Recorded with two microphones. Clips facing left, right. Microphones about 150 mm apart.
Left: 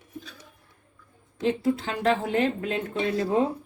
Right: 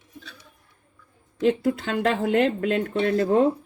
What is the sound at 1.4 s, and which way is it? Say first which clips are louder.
Speech: right 3 dB; 65° right (ahead or behind).